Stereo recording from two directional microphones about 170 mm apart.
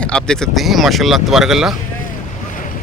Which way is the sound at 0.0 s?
5° left (ahead or behind).